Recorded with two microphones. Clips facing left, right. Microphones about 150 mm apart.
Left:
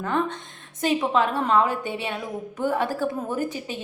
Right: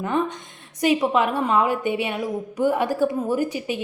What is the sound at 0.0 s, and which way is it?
A woman's voice, 15° right (ahead or behind).